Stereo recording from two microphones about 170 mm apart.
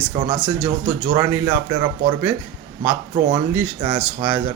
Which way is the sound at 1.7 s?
25° right (ahead or behind).